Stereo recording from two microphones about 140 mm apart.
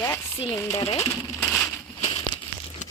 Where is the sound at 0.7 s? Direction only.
45° left (ahead or behind).